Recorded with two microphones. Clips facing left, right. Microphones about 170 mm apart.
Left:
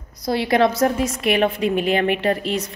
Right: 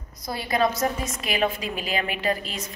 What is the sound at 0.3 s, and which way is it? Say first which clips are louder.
A woman's voice: left 7 dB; 75° left (ahead or behind).